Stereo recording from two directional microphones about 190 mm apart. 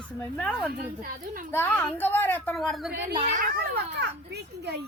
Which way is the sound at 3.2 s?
40° right (ahead or behind).